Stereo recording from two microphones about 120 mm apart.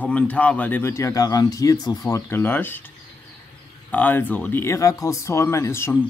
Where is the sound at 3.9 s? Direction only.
15° left (ahead or behind).